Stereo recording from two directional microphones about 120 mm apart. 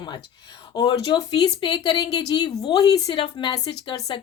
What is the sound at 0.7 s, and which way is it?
Speech, 40° left (ahead or behind).